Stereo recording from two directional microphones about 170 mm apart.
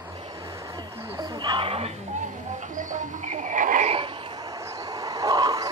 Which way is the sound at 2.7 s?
50° right (ahead or behind).